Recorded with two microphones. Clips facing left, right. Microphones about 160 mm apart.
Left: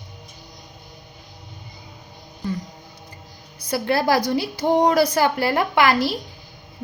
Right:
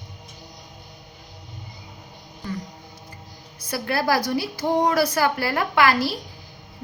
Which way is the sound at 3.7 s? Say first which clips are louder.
Left 3 dB; 25° left (ahead or behind).